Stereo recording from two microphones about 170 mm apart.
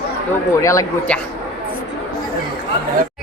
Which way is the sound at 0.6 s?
15° left (ahead or behind).